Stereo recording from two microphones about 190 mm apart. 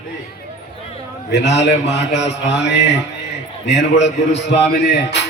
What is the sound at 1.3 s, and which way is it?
A man's voice, 60° left (ahead or behind).